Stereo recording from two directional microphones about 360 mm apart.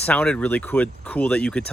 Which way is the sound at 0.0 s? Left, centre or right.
Centre.